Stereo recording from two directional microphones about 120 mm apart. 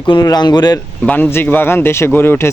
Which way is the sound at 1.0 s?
15° left (ahead or behind).